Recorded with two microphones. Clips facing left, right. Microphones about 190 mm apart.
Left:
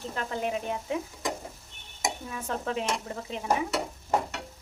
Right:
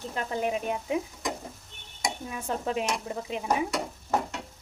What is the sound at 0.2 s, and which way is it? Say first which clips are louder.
Speech: right 2 dB; 15° right (ahead or behind).